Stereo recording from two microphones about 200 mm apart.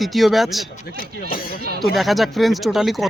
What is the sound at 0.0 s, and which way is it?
Speech, centre (ahead or behind).